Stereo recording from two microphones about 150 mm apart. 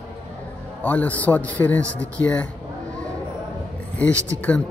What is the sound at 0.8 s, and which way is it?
Speech, 10° left (ahead or behind).